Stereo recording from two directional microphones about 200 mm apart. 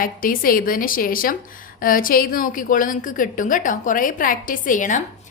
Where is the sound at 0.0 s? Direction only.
45° left (ahead or behind).